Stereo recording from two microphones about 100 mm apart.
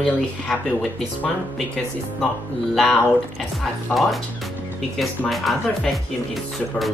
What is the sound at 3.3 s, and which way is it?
Speech, centre (ahead or behind).